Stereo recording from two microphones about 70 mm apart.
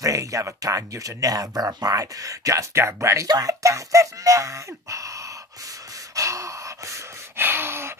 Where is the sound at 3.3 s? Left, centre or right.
Right.